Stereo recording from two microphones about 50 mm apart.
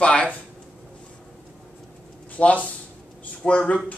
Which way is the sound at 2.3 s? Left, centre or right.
Left.